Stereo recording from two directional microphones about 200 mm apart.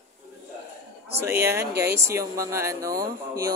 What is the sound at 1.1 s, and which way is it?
Speech, 15° right (ahead or behind).